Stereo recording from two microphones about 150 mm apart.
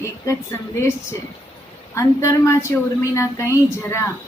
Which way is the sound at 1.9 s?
20° left (ahead or behind).